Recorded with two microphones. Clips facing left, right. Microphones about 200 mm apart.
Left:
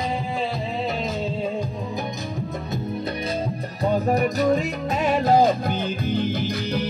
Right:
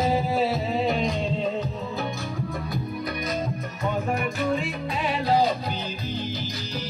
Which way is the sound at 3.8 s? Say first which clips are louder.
Left 6 dB; 35° left (ahead or behind).